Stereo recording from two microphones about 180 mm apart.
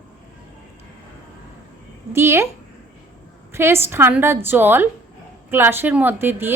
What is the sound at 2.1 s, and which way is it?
Speech, 15° right (ahead or behind).